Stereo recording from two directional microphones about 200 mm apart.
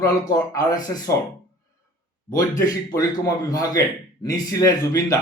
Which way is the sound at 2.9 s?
20° left (ahead or behind).